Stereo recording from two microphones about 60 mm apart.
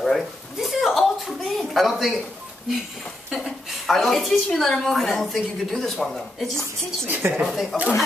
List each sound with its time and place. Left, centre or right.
0.0 s a sound: centre
3.3 s a woman's voice: centre
7.1 s speech: right
7.7 s a woman's voice: centre